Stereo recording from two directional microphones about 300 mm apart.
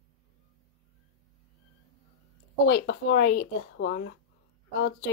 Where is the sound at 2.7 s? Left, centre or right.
Left.